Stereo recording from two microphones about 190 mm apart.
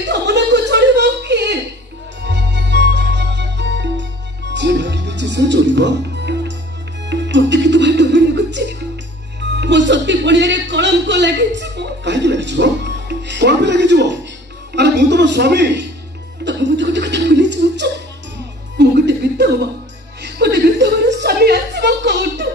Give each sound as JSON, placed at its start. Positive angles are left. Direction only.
{"t": 0.0, "sound": "chuckle", "side_deg": -65}
{"t": 2.2, "sound": "music", "side_deg": -65}
{"t": 14.8, "sound": "a sound", "side_deg": -65}
{"t": 16.4, "sound": "chuckle", "side_deg": -65}
{"t": 18.8, "sound": "music", "side_deg": -65}
{"t": 20.2, "sound": "a sound", "side_deg": -60}